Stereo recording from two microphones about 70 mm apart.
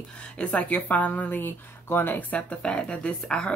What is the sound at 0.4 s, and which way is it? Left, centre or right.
Speech, left.